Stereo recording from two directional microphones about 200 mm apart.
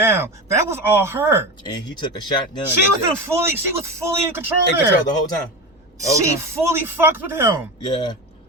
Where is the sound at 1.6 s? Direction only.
20° left (ahead or behind).